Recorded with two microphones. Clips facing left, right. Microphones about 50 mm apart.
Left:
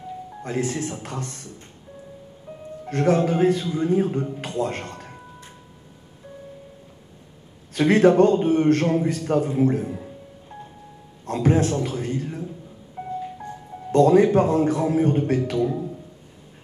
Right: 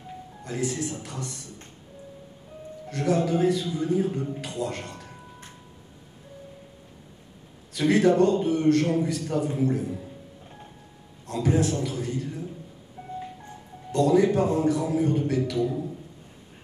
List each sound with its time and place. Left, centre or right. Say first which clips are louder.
0.4 s a man's voice: left 3 dB; left
2.9 s a man's voice: left 4 dB; left
7.7 s a man's voice: left 4 dB; left
11.2 s a man's voice: left 4 dB; left
13.0 s music: left 8 dB; left
13.9 s a man's voice: left 5 dB; left